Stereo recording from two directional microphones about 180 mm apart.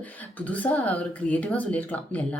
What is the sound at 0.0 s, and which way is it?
A woman's voice, 10° left (ahead or behind).